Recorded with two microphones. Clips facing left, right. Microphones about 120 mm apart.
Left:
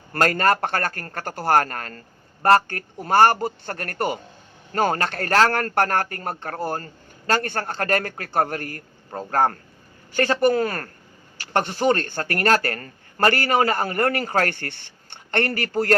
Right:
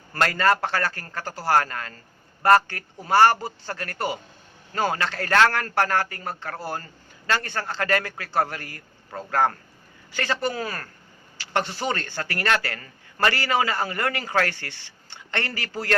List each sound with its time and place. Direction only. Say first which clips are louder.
0.1 s speech: left 2 dB; 50° left (ahead or behind)